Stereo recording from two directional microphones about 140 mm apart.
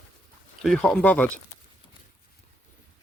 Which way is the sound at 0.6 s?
Centre (ahead or behind).